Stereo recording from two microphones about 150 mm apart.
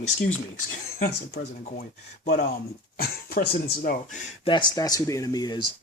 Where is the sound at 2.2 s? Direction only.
70° left (ahead or behind).